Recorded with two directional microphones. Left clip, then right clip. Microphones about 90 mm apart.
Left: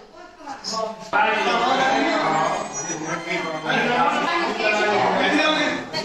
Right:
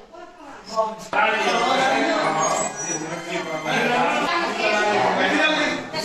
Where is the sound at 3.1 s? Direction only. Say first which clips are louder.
Left 2 dB; 35° left (ahead or behind).